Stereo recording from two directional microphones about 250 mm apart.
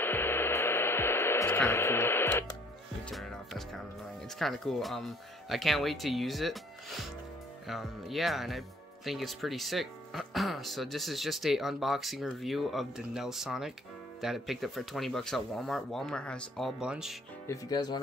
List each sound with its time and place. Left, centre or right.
0.0 s hair dryer: centre
3.1 s speech: centre
17.5 s speech: centre